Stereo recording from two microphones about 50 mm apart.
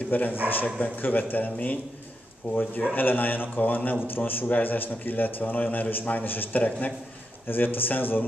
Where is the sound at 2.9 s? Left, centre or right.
Left.